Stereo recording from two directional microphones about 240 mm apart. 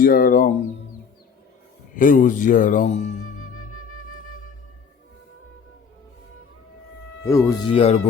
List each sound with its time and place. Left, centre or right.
0.0 s speech: left
2.0 s speech: left
7.3 s speech: centre
7.7 s speech: left